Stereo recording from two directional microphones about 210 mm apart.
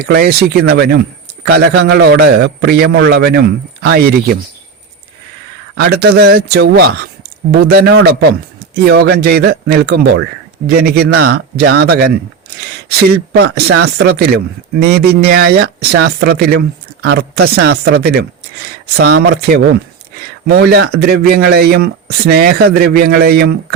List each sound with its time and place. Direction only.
0.1 s speech: 50° right (ahead or behind)
5.7 s speech: 50° right (ahead or behind)